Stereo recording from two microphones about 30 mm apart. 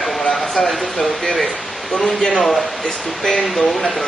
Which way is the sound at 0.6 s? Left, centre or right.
Left.